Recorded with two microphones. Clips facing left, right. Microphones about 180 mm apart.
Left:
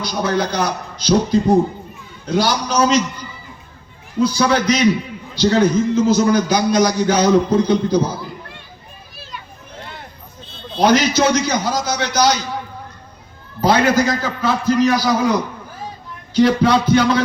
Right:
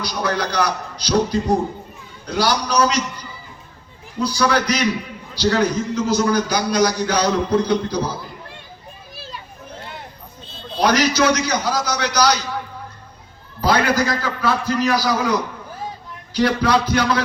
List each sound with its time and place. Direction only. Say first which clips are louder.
0.0 s a man's voice: left 3 dB; 25° left (ahead or behind)
2.4 s a man's voice: even; 25° left (ahead or behind)
4.2 s a man's voice: left 3 dB; 25° left (ahead or behind)
10.8 s a man's voice: left 3 dB; 25° left (ahead or behind)
13.6 s a man's voice: left 3 dB; 25° left (ahead or behind)
16.3 s a man's voice: left 4 dB; 25° left (ahead or behind)